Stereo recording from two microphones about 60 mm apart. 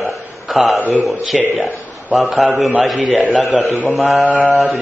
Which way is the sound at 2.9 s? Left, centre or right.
Right.